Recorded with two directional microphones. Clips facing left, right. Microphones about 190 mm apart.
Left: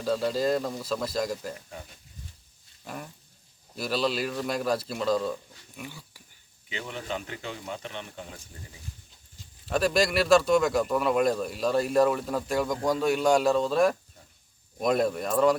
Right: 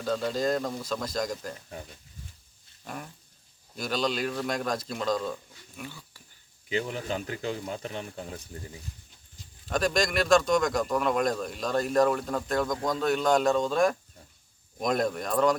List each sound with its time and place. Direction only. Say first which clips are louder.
0.0 s speech: left 2 dB; 5° left (ahead or behind)
2.8 s speech: even; centre (ahead or behind)
5.8 s dog: even; 15° left (ahead or behind)
6.7 s speech: right 4 dB; 40° right (ahead or behind)
9.6 s speech: left 2 dB; 5° left (ahead or behind)